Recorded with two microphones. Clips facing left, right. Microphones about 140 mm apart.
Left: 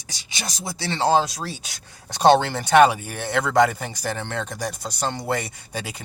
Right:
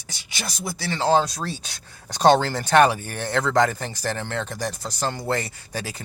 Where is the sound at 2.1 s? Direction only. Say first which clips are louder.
Left 1 dB; 15° left (ahead or behind).